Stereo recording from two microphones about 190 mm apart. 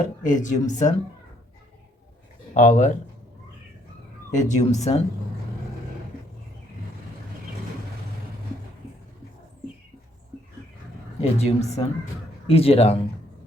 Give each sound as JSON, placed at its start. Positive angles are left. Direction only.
{"t": 0.3, "sound": "speech", "side_deg": 40}
{"t": 2.6, "sound": "speech", "side_deg": 40}
{"t": 4.4, "sound": "speech", "side_deg": 40}
{"t": 11.2, "sound": "speech", "side_deg": 35}